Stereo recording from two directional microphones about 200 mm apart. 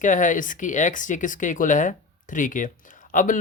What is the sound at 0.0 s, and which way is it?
Speech, 40° left (ahead or behind).